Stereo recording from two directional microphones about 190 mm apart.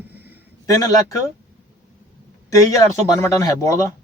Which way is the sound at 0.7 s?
15° left (ahead or behind).